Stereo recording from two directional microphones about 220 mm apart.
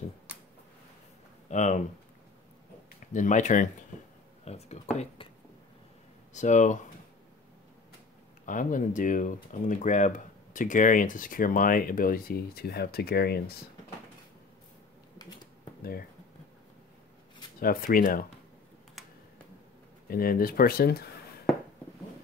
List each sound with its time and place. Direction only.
1.5 s speech: 35° left (ahead or behind)
3.1 s speech: 35° left (ahead or behind)
6.3 s speech: 35° left (ahead or behind)
8.5 s speech: 35° left (ahead or behind)
17.6 s speech: 40° left (ahead or behind)
19.0 s computer keyboard: centre (ahead or behind)
20.1 s speech: 40° left (ahead or behind)